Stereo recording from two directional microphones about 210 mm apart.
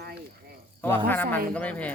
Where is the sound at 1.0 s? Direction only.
10° left (ahead or behind).